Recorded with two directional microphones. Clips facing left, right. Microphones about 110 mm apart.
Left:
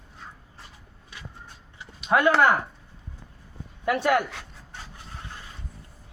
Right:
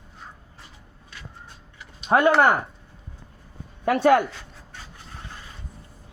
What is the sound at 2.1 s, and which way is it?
Speech, 30° right (ahead or behind).